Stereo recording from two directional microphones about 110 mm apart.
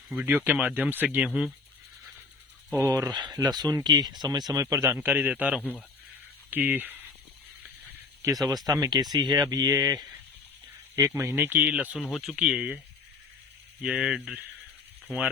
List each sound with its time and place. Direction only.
0.1 s speech: 15° right (ahead or behind)
2.7 s speech: 30° right (ahead or behind)
4.9 s speech: 15° right (ahead or behind)
8.6 s speech: 35° right (ahead or behind); by 12.8 s 10° right (ahead or behind)
13.8 s speech: 5° right (ahead or behind)